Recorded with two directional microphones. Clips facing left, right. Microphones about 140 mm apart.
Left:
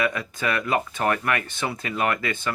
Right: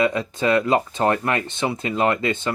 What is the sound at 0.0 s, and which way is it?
Speech, 25° right (ahead or behind).